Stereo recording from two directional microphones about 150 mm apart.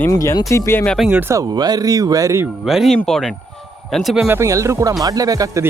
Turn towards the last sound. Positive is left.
turn(degrees=-25)  # may be behind; listen again after turning